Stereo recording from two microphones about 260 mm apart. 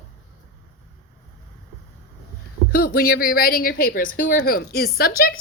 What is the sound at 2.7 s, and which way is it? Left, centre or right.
A woman's voice, left.